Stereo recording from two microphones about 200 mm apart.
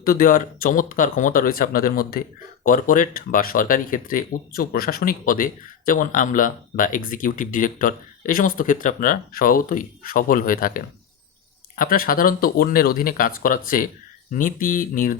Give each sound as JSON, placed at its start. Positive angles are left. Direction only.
{"t": 0.0, "sound": "speech", "side_deg": 45}